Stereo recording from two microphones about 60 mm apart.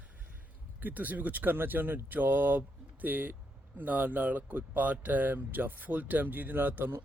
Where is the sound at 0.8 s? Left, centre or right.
Right.